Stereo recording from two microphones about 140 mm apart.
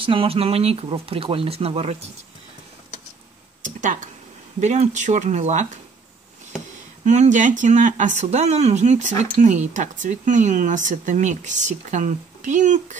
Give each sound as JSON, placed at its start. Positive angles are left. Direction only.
{"t": 0.0, "sound": "speech", "side_deg": -40}
{"t": 3.6, "sound": "speech", "side_deg": -65}
{"t": 7.1, "sound": "speech", "side_deg": -60}